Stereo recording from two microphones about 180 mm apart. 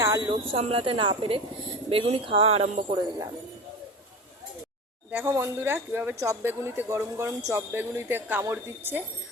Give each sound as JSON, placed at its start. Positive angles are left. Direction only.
{"t": 0.0, "sound": "a sound", "side_deg": -20}
{"t": 0.5, "sound": "speech", "side_deg": -30}
{"t": 5.1, "sound": "speech", "side_deg": -15}